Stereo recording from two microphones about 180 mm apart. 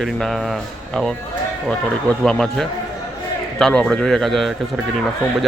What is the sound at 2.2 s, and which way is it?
Speech, 5° left (ahead or behind).